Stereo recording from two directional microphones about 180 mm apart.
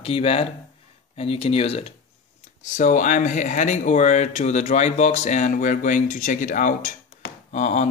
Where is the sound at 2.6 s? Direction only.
45° left (ahead or behind).